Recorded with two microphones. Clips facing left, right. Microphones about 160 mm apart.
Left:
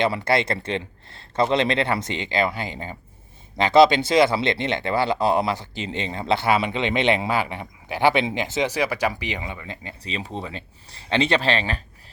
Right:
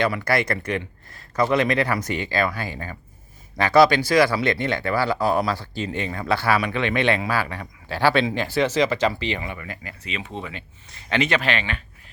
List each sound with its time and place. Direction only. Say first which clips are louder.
0.0 s speech: left 1 dB; 25° left (ahead or behind)